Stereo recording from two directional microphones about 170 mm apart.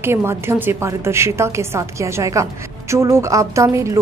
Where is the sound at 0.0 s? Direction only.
15° right (ahead or behind).